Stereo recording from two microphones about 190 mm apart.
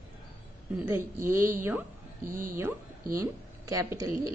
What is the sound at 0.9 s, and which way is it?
Speech, 10° right (ahead or behind).